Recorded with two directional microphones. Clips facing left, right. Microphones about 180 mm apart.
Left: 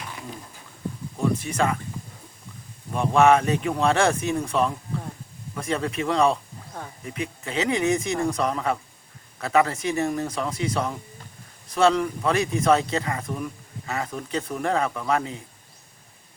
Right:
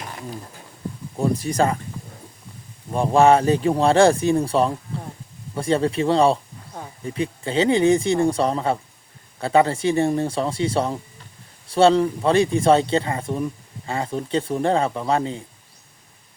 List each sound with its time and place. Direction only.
1.2 s speech: 35° right (ahead or behind)
2.9 s speech: 30° right (ahead or behind)